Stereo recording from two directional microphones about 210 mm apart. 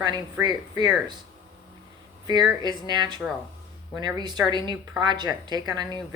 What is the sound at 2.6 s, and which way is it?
A woman's voice, 20° right (ahead or behind).